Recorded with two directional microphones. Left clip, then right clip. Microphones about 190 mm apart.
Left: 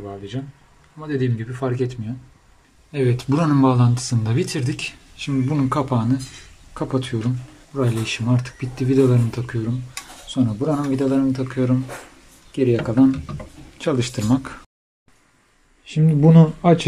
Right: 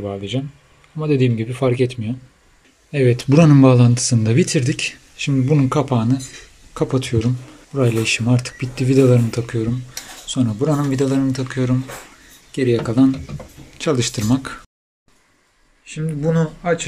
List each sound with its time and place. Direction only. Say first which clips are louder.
0.0 s speech: right 7 dB; 5° right (ahead or behind)
15.8 s speech: left 5 dB; 25° left (ahead or behind)